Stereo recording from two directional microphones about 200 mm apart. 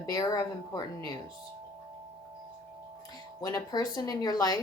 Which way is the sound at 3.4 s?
20° left (ahead or behind).